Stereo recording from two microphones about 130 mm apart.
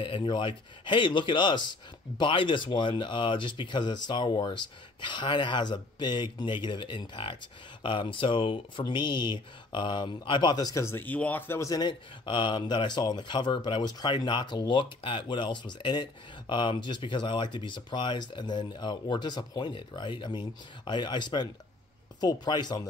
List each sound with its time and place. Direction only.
0.0 s speech: 40° left (ahead or behind)